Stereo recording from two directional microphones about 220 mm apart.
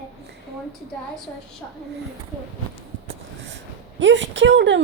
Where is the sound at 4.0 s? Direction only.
55° right (ahead or behind).